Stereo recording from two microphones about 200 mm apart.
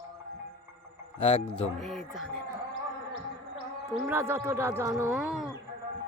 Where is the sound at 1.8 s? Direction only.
Centre (ahead or behind).